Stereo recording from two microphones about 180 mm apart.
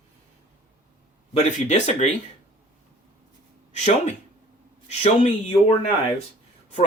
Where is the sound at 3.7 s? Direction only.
40° left (ahead or behind).